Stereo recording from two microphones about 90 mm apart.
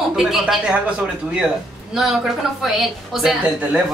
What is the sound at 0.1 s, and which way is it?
A woman's voice, 5° right (ahead or behind).